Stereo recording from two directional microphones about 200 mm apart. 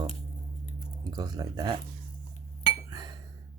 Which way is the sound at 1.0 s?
20° right (ahead or behind).